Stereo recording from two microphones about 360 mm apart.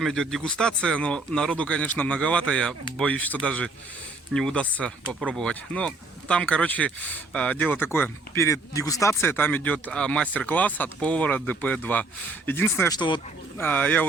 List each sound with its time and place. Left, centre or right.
0.0 s speech: centre